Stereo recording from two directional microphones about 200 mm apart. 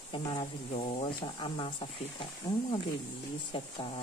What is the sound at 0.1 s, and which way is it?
Speech, 25° left (ahead or behind).